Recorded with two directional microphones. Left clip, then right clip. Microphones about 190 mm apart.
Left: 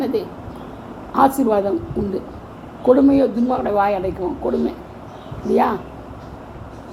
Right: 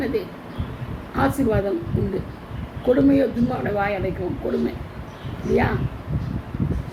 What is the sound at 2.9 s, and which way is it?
A man's voice, 25° left (ahead or behind).